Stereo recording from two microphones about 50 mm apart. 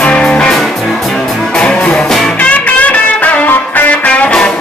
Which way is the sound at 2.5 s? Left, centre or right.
Left.